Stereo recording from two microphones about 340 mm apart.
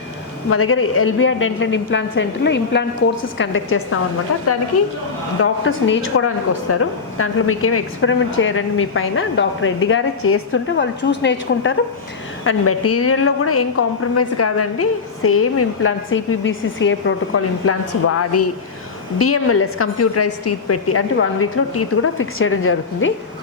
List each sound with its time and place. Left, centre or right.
0.5 s a woman's voice: left
5.4 s a woman's voice: left